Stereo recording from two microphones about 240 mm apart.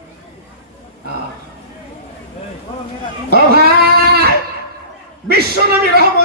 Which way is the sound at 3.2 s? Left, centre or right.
Right.